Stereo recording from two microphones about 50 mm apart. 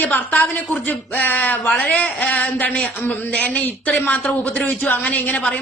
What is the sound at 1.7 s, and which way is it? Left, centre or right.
A woman's voice, left.